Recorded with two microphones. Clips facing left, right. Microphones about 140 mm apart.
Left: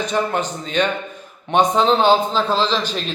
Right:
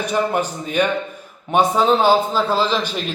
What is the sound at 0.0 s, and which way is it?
A man's voice, 10° right (ahead or behind).